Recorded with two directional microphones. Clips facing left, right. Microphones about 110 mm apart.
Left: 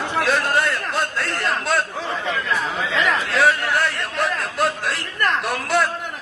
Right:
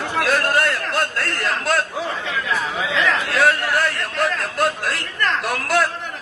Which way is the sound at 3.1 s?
Centre (ahead or behind).